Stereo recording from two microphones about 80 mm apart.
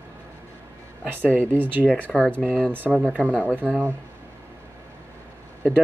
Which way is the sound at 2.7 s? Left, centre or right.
Right.